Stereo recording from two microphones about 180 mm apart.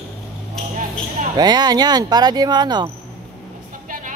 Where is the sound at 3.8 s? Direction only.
45° right (ahead or behind).